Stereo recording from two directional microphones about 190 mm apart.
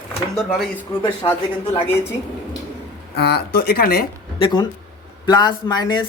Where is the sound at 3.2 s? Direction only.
60° left (ahead or behind).